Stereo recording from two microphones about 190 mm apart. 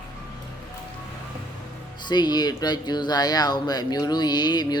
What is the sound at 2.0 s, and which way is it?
Speech, 20° left (ahead or behind).